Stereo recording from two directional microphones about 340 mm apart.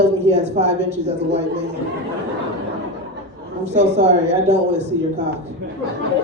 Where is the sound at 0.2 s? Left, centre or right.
Centre.